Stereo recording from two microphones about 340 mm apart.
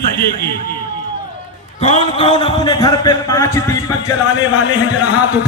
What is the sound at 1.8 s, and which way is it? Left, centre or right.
A man's voice, centre.